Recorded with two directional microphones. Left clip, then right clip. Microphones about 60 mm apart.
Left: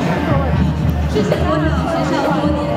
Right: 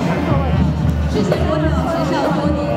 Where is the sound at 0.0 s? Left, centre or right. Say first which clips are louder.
Left 1 dB; left.